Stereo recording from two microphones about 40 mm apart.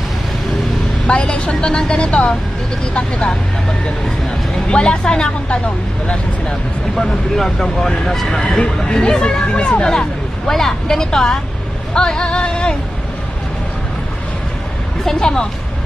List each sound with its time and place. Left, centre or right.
1.0 s a woman's voice: left
4.6 s speech: left
7.0 s speech: centre
8.7 s speech: centre
9.8 s speech: centre
15.0 s speech: centre